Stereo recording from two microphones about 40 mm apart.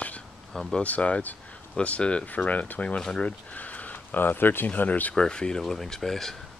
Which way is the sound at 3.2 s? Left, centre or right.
Left.